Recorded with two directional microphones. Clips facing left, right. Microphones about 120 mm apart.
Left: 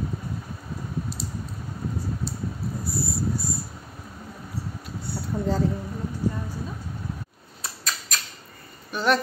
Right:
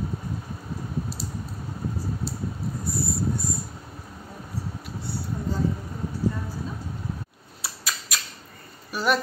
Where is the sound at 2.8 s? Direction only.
Centre (ahead or behind).